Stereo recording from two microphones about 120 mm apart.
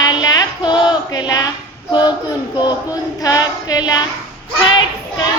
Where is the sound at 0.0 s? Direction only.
35° left (ahead or behind).